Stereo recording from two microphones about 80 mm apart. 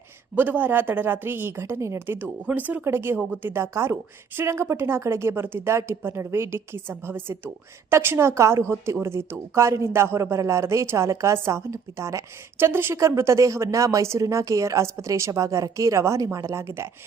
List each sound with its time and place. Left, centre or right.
0.3 s a woman's voice: right